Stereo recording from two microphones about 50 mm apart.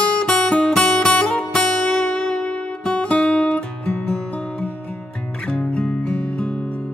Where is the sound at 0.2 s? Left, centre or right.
Centre.